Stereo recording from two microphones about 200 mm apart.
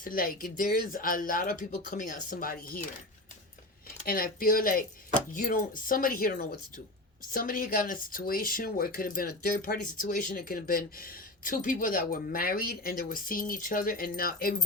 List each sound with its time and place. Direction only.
0.0 s speech: 45° left (ahead or behind)
4.0 s speech: 45° left (ahead or behind)